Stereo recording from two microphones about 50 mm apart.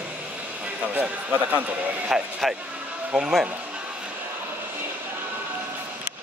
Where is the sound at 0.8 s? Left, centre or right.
Right.